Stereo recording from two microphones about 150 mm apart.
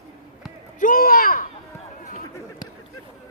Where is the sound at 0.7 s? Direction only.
65° left (ahead or behind).